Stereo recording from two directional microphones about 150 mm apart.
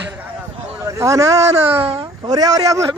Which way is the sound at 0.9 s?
20° right (ahead or behind).